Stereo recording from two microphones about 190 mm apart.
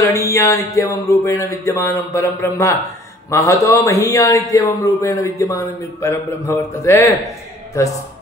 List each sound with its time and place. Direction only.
0.0 s a man's voice: 15° left (ahead or behind)